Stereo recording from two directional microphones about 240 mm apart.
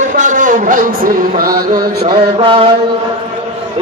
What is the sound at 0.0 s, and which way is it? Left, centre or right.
Speech, right.